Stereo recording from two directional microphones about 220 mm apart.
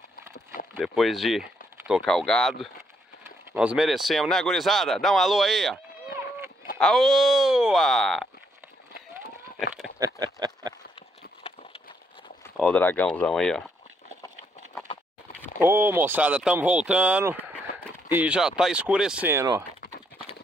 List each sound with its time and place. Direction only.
0.7 s speech: centre (ahead or behind)
6.8 s speech: centre (ahead or behind)
9.9 s a sound: 15° right (ahead or behind)
12.5 s speech: 5° left (ahead or behind)
15.6 s speech: 10° right (ahead or behind)